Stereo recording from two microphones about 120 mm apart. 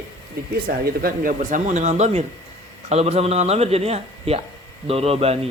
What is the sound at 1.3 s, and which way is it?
Speech, 90° right.